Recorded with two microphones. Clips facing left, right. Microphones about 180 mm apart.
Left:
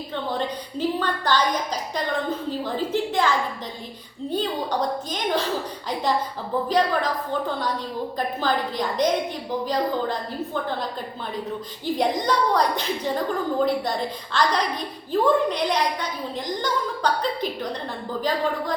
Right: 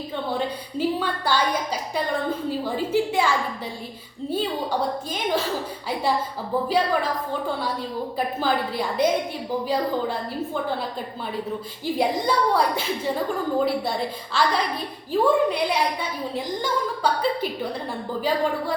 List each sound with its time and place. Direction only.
0.3 s a woman's voice: 10° right (ahead or behind)
6.7 s a woman's voice: 5° right (ahead or behind)
8.4 s a woman's voice: 5° right (ahead or behind)
11.9 s a woman's voice: 5° right (ahead or behind)